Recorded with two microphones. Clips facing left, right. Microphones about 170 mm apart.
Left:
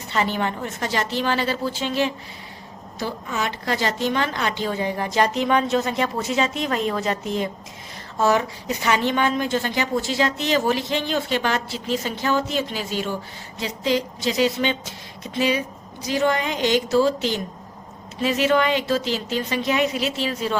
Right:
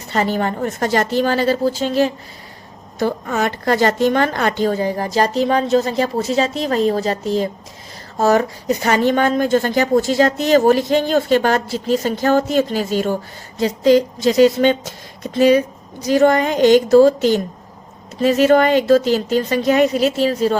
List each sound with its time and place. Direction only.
0.1 s a woman's voice: 40° right (ahead or behind)
3.0 s a woman's voice: 50° right (ahead or behind)